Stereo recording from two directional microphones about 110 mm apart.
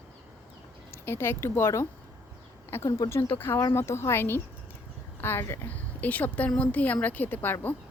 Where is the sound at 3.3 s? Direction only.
20° left (ahead or behind).